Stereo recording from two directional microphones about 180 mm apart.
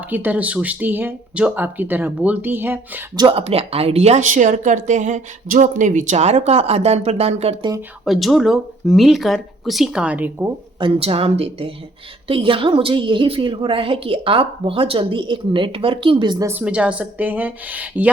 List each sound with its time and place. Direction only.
0.1 s speech: 10° right (ahead or behind)
3.2 s speech: 30° right (ahead or behind)
8.0 s speech: centre (ahead or behind)
10.8 s a woman's voice: 30° right (ahead or behind)
16.5 s speech: 10° right (ahead or behind)